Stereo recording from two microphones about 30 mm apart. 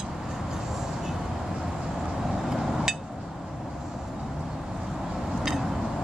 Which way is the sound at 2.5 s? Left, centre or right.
Centre.